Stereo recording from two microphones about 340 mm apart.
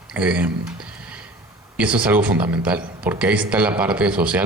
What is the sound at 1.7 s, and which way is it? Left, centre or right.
Speech, centre.